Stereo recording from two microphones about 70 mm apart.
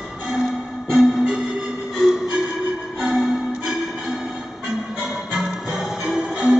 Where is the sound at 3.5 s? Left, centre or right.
Centre.